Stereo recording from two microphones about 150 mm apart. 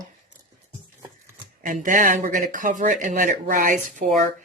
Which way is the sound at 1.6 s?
60° right (ahead or behind).